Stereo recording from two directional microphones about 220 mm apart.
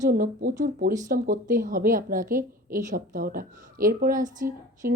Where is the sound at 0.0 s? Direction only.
40° right (ahead or behind).